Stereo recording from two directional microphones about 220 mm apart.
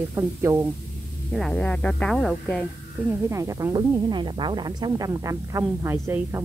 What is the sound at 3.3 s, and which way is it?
Speech, 15° right (ahead or behind).